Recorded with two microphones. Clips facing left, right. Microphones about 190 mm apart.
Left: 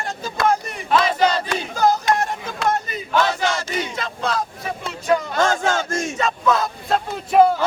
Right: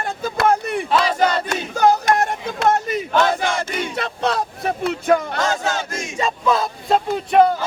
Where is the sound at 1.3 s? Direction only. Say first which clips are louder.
Right 1 dB; 65° right (ahead or behind).